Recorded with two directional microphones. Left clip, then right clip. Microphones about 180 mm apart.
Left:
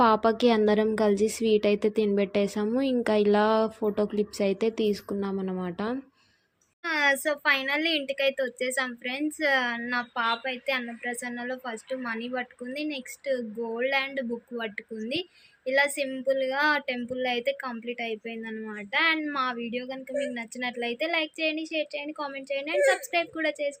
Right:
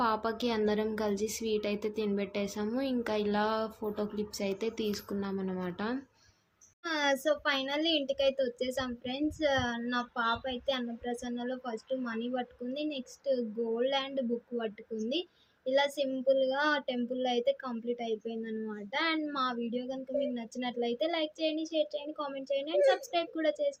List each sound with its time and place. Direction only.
0.0 s speech: 35° left (ahead or behind)
6.8 s a woman's voice: 5° left (ahead or behind)